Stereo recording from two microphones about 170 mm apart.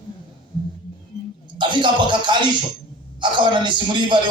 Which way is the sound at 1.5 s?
30° right (ahead or behind).